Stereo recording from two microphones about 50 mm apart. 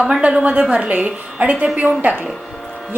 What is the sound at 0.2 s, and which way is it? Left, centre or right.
A woman's voice, right.